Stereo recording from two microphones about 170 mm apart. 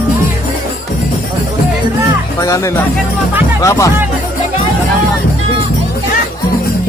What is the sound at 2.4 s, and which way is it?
Speech, 20° left (ahead or behind).